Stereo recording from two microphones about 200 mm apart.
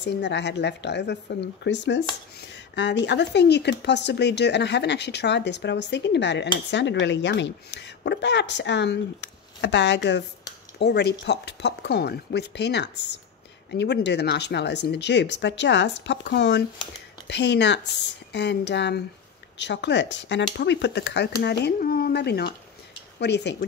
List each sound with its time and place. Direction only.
0.0 s speech: 60° left (ahead or behind)